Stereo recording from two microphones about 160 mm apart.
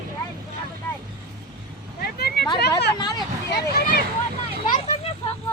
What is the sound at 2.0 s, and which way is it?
Vehicle, 75° left (ahead or behind).